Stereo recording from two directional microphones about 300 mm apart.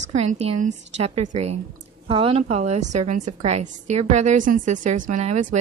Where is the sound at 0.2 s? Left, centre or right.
Right.